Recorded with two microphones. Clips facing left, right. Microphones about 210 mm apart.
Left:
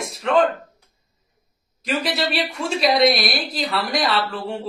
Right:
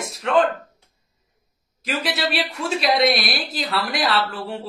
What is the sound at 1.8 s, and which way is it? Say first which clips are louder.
Speech: left 2 dB; centre (ahead or behind).